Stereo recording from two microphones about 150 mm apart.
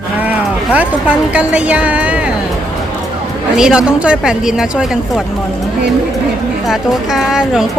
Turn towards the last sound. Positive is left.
turn(degrees=-5)  # may be behind; listen again after turning